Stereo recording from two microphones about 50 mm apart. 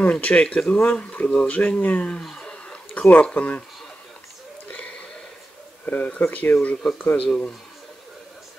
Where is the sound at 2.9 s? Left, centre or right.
Left.